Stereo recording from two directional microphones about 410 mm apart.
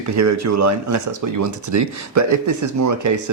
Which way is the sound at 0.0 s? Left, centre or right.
Right.